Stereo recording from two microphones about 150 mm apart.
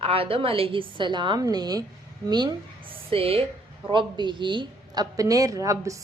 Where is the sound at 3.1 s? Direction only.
40° right (ahead or behind).